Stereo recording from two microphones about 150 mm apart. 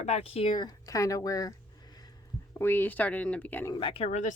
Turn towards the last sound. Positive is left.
turn(degrees=45)  # may be behind; listen again after turning